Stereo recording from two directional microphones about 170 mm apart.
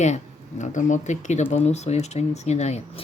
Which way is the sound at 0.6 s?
45° left (ahead or behind).